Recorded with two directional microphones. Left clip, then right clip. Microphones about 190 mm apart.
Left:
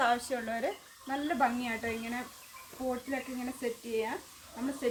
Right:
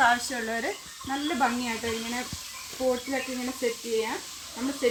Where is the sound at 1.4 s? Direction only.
10° left (ahead or behind).